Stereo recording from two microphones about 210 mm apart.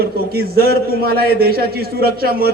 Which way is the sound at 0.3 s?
45° right (ahead or behind).